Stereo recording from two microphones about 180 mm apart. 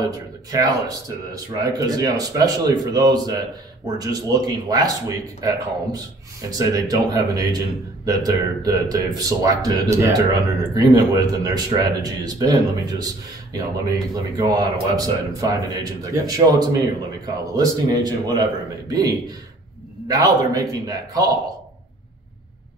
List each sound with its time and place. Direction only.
0.0 s speech: 20° right (ahead or behind)